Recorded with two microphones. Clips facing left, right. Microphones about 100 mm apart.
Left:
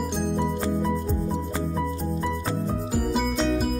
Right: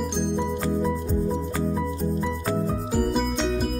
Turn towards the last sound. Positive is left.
turn(degrees=0)  # may be behind; listen again after turning